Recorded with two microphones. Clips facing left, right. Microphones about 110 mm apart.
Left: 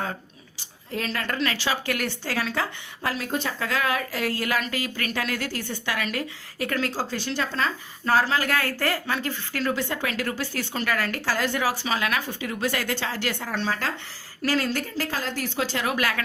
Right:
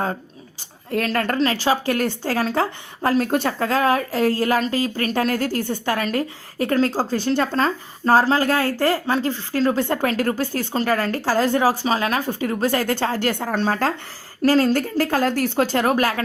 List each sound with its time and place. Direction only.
0.9 s a woman's voice: 55° right (ahead or behind)
1.4 s a woman's voice: 40° right (ahead or behind)
9.9 s a woman's voice: 40° right (ahead or behind)